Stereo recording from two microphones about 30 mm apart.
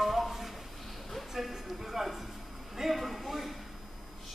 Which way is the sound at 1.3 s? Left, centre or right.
Centre.